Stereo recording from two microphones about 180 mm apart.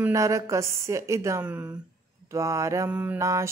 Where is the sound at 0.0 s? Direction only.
15° right (ahead or behind).